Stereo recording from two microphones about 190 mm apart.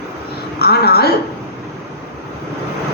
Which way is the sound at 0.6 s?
55° left (ahead or behind).